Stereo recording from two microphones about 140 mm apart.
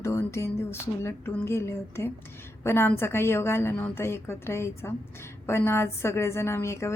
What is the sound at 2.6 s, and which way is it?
A woman's voice, 15° left (ahead or behind).